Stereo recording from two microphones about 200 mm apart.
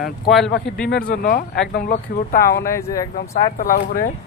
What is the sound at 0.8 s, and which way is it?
Speech, 50° left (ahead or behind).